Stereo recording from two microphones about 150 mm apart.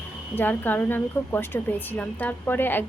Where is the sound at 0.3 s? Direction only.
10° left (ahead or behind).